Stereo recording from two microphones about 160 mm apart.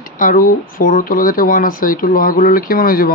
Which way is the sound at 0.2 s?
60° left (ahead or behind).